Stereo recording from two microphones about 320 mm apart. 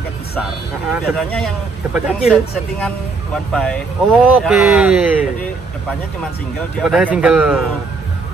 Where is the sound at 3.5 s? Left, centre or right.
Centre.